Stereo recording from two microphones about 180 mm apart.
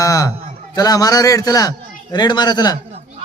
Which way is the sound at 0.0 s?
20° left (ahead or behind).